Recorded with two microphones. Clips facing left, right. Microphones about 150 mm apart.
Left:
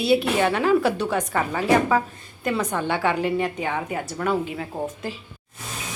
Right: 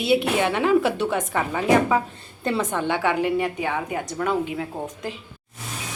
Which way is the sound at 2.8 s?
15° right (ahead or behind).